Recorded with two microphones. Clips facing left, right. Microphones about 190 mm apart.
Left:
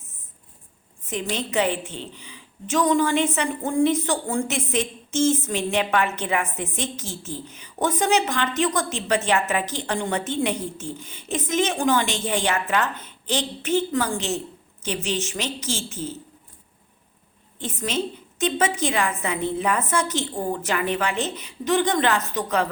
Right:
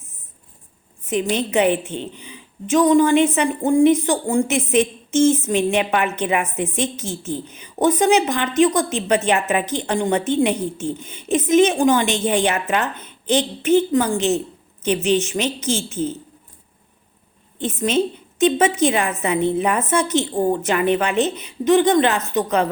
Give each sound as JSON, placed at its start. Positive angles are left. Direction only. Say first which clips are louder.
{"t": 1.0, "sound": "a woman's voice", "louder": "right 7 dB", "side_deg": -20}
{"t": 17.6, "sound": "a woman's voice", "louder": "right 7 dB", "side_deg": -20}